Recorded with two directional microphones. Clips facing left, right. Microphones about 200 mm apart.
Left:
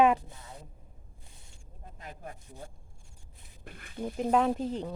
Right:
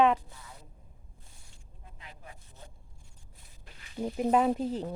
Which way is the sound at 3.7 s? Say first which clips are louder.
Left 8 dB; 55° left (ahead or behind).